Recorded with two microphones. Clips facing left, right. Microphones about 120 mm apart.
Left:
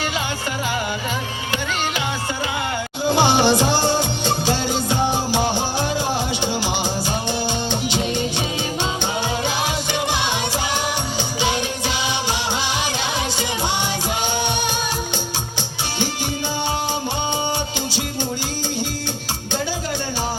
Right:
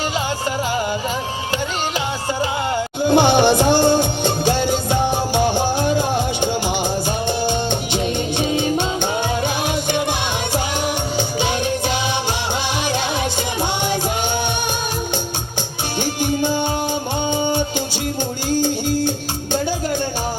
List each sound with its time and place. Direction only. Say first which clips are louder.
3.1 s music: right 3 dB; 55° right (ahead or behind)
17.3 s music: right 4 dB; 50° right (ahead or behind)